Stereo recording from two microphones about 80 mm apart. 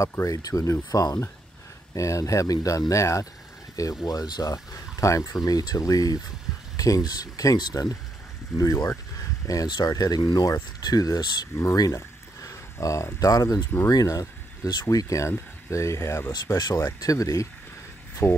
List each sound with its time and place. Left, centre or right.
0.0 s speech: left
4.0 s speech: left
8.5 s speech: left
18.2 s speech: left